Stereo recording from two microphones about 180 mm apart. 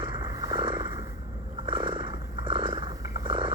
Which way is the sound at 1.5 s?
25° right (ahead or behind).